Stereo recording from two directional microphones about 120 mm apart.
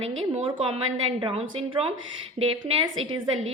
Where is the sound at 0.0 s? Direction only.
50° right (ahead or behind).